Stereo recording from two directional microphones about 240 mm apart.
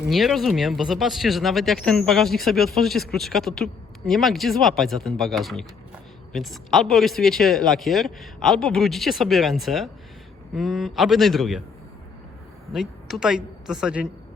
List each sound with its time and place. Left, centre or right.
0.1 s speech: centre
12.7 s speech: centre